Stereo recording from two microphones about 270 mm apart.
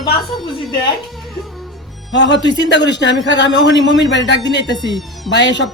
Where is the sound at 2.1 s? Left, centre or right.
Left.